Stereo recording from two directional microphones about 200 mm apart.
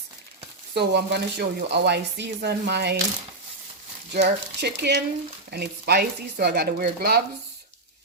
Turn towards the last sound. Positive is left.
turn(degrees=-50)  # may be behind; listen again after turning